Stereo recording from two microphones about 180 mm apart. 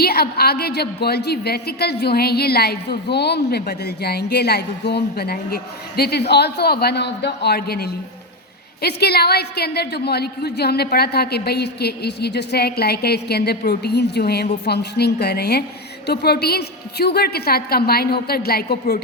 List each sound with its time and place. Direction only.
0.0 s a woman's voice: 60° left (ahead or behind)